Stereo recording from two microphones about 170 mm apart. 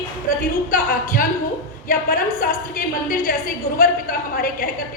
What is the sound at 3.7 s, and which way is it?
Speech, 60° left (ahead or behind).